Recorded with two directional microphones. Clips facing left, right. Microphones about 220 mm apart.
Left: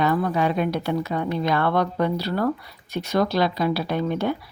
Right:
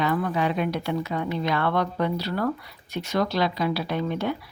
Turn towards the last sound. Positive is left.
turn(degrees=45)  # may be behind; listen again after turning